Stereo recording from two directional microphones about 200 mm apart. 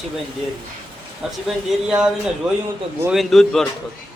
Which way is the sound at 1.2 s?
Centre (ahead or behind).